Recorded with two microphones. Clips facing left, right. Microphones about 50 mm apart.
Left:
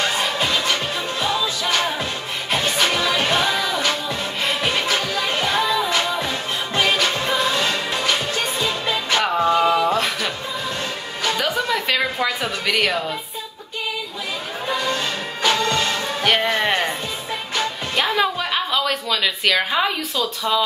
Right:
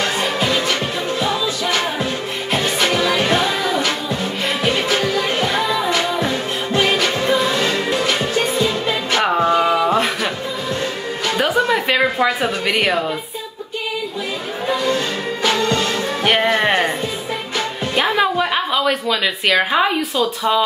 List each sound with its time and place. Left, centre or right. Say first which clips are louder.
2.9 s music: right 3 dB; centre
3.3 s music: right 2 dB; right
4.8 s music: right 4 dB; right
7.5 s music: right 4 dB; right
15.7 s music: right 3 dB; centre
17.9 s a sound: right 4 dB; centre